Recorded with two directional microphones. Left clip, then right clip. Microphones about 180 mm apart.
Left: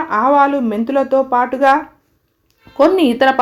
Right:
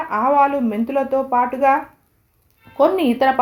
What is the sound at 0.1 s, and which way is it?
Speech, 30° left (ahead or behind).